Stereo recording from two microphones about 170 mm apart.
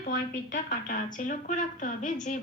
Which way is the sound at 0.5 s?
50° left (ahead or behind).